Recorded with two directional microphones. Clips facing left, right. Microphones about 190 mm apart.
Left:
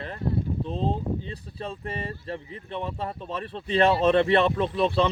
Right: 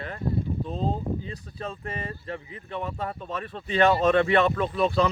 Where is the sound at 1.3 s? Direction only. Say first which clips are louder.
Even; 30° left (ahead or behind).